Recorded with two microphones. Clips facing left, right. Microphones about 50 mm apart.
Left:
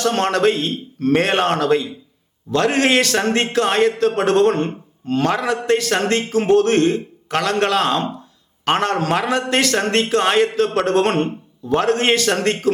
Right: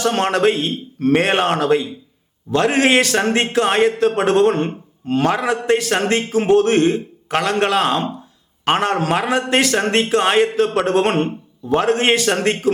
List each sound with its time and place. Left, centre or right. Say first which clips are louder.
0.0 s a man's voice: even; centre